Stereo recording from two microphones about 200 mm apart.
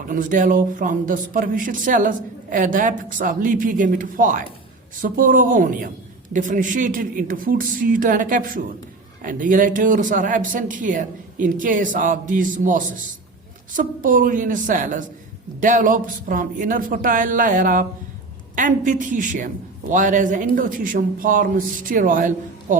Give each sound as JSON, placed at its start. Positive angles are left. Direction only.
{"t": 0.1, "sound": "a man's voice", "side_deg": -40}